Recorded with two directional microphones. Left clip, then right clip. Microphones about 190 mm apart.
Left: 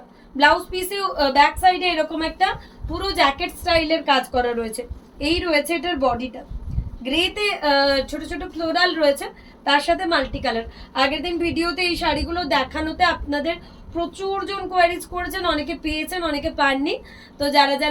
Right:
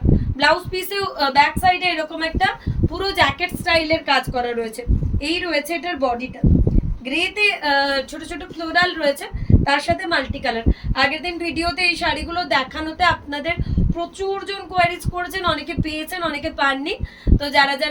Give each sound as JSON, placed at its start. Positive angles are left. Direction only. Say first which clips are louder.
{"t": 0.3, "sound": "a woman's voice", "louder": "left 2 dB", "side_deg": -20}